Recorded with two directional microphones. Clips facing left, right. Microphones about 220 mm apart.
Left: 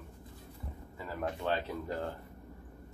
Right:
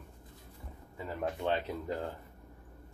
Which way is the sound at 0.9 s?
20° right (ahead or behind).